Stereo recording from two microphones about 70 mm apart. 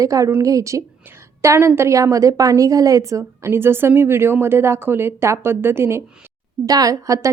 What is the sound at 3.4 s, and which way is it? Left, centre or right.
Speech, right.